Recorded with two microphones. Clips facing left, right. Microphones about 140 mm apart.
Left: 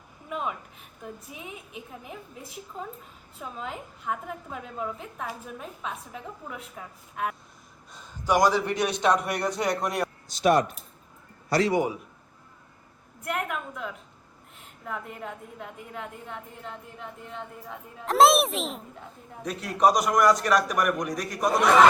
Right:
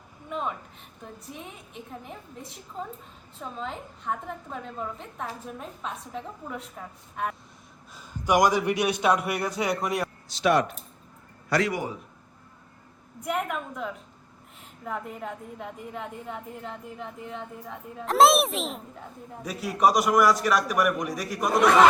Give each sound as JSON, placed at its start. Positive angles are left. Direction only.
{"t": 0.3, "sound": "a woman's voice", "side_deg": 5}
{"t": 7.9, "sound": "a woman's voice", "side_deg": -15}
{"t": 10.2, "sound": "speech", "side_deg": 45}
{"t": 11.5, "sound": "a man's voice", "side_deg": 30}
{"t": 13.2, "sound": "a woman's voice", "side_deg": 0}